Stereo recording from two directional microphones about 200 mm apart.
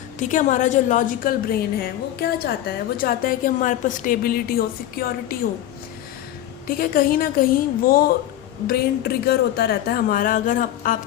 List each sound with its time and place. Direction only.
0.2 s a woman's voice: 40° left (ahead or behind)
6.7 s a woman's voice: 45° left (ahead or behind)